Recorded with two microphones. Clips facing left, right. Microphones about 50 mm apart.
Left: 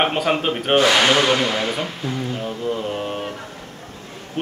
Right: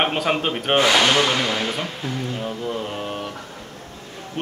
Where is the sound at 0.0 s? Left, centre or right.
Centre.